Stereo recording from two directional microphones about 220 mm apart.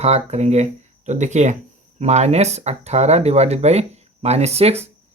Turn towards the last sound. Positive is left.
turn(degrees=-30)  # may be behind; listen again after turning